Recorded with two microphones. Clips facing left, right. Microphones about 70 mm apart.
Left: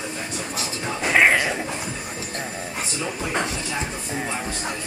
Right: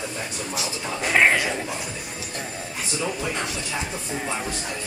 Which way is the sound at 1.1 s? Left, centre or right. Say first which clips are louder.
Left 1 dB; centre.